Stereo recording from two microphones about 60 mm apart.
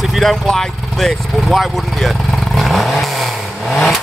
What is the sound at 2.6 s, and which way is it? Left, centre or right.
Vehicle, centre.